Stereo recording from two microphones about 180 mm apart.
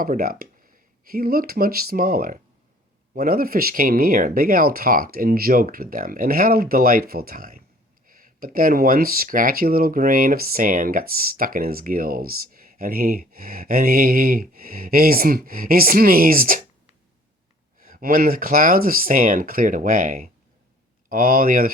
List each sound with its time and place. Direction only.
0.0 s speech: 55° right (ahead or behind)
17.7 s speech: 50° right (ahead or behind)